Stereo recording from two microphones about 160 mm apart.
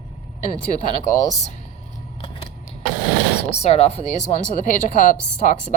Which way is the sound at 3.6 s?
40° left (ahead or behind).